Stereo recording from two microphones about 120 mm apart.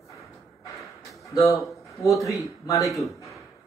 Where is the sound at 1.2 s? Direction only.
25° left (ahead or behind).